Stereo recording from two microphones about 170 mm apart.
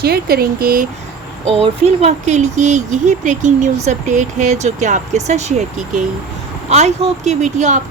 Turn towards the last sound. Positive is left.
turn(degrees=-45)  # may be behind; listen again after turning